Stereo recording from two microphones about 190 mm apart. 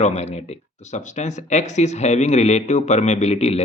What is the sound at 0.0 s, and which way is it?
Speech, 35° left (ahead or behind).